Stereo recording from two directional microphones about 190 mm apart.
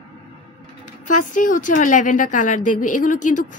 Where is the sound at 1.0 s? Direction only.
45° left (ahead or behind).